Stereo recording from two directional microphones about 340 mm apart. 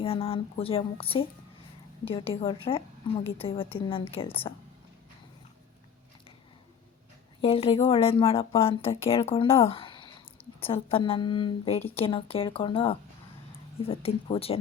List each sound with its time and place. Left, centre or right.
0.0 s speech: centre
7.4 s speech: centre